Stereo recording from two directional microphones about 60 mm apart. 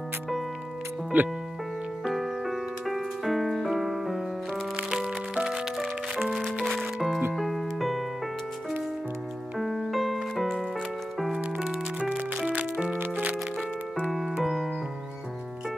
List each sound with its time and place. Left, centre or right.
1.1 s speech: right
2.0 s music: centre
5.8 s music: centre
9.6 s music: centre
11.6 s music: centre
12.9 s music: right
14.4 s music: centre